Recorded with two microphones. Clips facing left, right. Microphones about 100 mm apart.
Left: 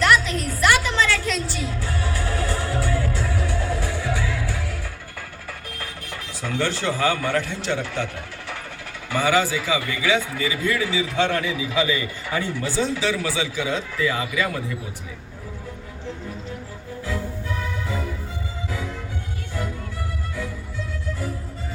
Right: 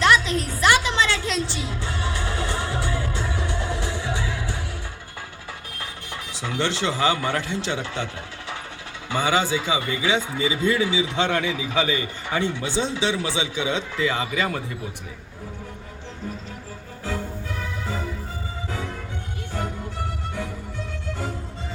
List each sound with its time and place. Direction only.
0.0 s a sound: 25° right (ahead or behind)
0.6 s music: 20° right (ahead or behind)
6.4 s speech: 15° right (ahead or behind)